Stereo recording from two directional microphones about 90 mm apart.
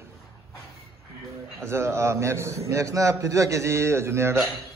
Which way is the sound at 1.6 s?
30° right (ahead or behind).